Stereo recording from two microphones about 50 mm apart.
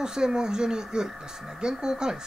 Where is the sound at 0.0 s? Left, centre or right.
Centre.